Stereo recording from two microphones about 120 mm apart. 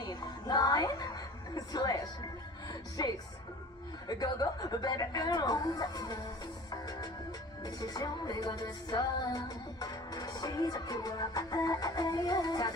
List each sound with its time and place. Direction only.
0.0 s music: 35° left (ahead or behind)
1.5 s a woman's voice: 35° left (ahead or behind)
3.0 s music: 35° left (ahead or behind)
7.6 s music: 35° left (ahead or behind)